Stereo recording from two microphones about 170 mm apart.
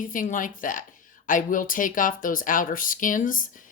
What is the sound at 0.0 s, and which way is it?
Speech, 50° left (ahead or behind).